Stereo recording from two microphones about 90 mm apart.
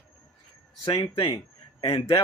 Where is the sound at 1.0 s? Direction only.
85° left.